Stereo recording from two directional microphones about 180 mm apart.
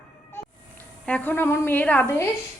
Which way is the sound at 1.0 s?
10° left (ahead or behind).